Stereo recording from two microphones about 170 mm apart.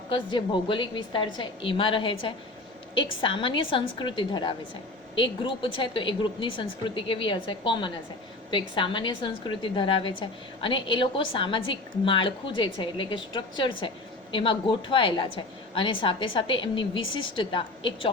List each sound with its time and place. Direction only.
0.1 s a woman's voice: 30° left (ahead or behind)